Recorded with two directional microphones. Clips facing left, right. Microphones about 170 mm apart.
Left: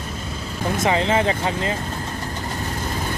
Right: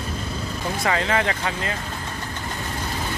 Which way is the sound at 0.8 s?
25° left (ahead or behind).